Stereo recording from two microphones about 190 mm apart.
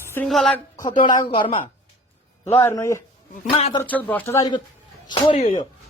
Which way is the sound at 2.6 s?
15° left (ahead or behind).